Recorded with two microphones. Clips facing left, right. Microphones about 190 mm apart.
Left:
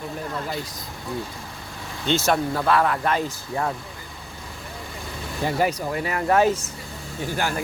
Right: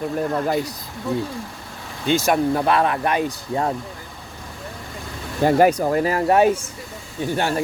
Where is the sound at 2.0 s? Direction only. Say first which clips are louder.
Right 3 dB; 15° right (ahead or behind).